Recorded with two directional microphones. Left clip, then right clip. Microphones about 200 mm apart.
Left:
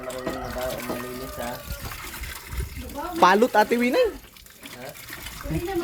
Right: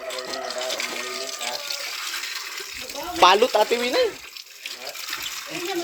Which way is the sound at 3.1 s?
5° left (ahead or behind).